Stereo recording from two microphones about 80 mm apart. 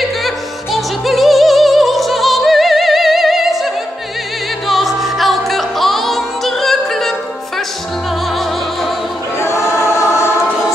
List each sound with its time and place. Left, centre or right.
0.7 s music: centre
9.4 s choir: left